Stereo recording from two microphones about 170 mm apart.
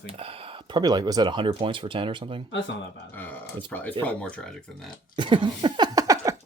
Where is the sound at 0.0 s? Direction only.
35° right (ahead or behind).